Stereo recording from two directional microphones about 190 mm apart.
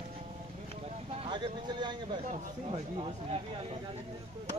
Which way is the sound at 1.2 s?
25° right (ahead or behind).